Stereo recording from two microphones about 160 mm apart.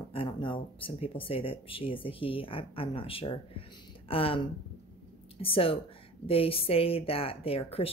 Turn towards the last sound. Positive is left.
turn(degrees=35)  # may be behind; listen again after turning